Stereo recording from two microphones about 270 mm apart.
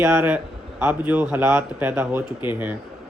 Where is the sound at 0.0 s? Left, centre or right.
Centre.